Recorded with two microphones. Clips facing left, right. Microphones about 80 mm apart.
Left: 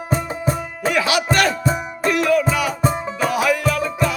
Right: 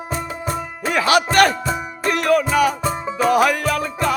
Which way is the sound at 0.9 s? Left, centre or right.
Right.